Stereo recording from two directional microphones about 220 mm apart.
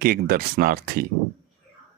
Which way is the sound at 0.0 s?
45° right (ahead or behind).